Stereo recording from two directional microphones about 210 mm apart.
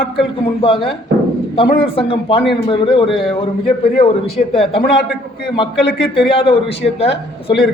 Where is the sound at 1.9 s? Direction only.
25° left (ahead or behind).